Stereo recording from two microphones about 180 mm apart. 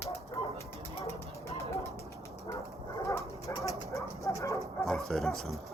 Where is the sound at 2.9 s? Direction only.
15° left (ahead or behind).